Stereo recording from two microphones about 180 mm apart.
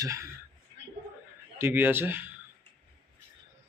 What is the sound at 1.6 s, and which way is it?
Speech, 10° right (ahead or behind).